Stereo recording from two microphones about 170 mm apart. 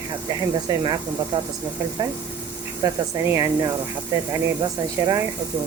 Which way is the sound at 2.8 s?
20° right (ahead or behind).